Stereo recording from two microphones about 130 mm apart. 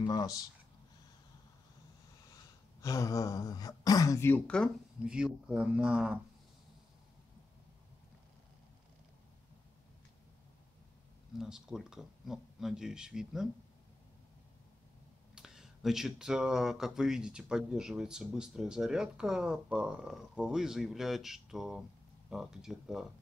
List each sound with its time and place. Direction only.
0.0 s speech: 30° left (ahead or behind)
2.8 s speech: 25° left (ahead or behind)
5.0 s speech: 5° right (ahead or behind)
11.3 s speech: 5° right (ahead or behind)
15.3 s speech: 5° right (ahead or behind)